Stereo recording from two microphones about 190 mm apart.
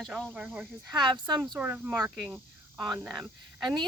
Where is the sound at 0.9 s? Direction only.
25° right (ahead or behind).